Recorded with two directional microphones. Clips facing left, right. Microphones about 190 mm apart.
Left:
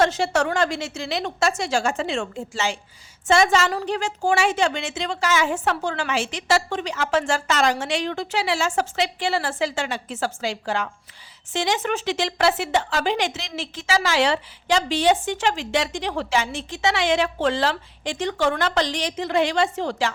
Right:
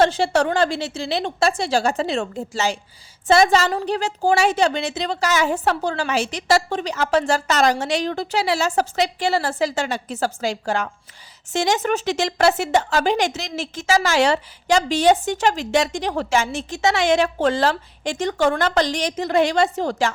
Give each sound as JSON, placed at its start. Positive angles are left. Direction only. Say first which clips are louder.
{"t": 0.0, "sound": "a woman's voice", "louder": "right 3 dB", "side_deg": -30}